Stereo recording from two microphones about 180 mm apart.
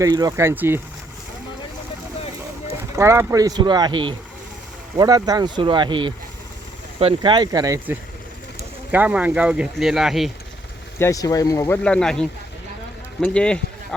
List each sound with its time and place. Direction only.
0.0 s speech: 20° right (ahead or behind)
2.9 s speech: 15° right (ahead or behind)
8.9 s speech: 10° right (ahead or behind)
10.9 s speech: 15° left (ahead or behind)
11.8 s speech: 5° left (ahead or behind)